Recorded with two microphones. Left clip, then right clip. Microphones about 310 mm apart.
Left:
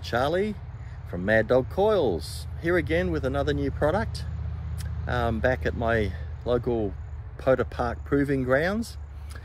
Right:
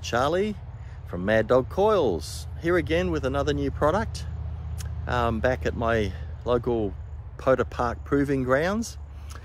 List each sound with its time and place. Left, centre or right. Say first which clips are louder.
0.0 s speech: right 1 dB; centre